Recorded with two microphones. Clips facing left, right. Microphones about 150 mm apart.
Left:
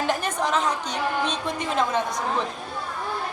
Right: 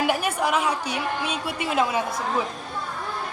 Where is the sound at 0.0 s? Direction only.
10° right (ahead or behind).